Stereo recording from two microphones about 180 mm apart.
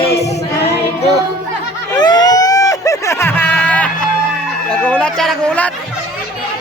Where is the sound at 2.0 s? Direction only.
25° left (ahead or behind); by 5.7 s 5° left (ahead or behind).